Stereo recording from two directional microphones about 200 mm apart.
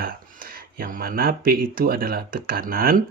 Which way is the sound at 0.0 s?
45° right (ahead or behind).